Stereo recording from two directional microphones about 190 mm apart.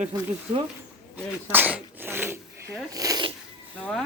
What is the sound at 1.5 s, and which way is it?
Sneeze, 10° right (ahead or behind).